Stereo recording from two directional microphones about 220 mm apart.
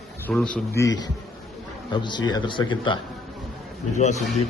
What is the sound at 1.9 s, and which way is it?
A man's voice, 20° left (ahead or behind).